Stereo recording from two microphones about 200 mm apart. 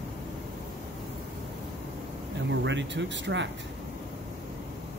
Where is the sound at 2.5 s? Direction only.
65° right (ahead or behind).